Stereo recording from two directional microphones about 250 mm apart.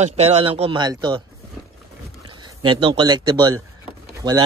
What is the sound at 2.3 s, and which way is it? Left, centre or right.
Speech, centre.